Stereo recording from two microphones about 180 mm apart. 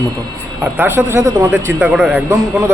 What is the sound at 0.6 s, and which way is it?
A man's voice, 10° right (ahead or behind).